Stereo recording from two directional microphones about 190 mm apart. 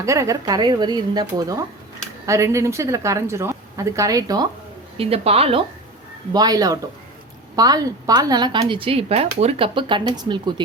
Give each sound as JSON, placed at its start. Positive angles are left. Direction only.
{"t": 0.0, "sound": "a woman's voice", "side_deg": -15}
{"t": 4.9, "sound": "a woman's voice", "side_deg": -30}
{"t": 6.3, "sound": "speech", "side_deg": -20}